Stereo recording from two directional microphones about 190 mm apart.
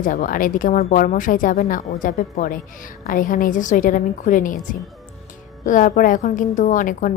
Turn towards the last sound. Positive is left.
turn(degrees=45)  # may be behind; listen again after turning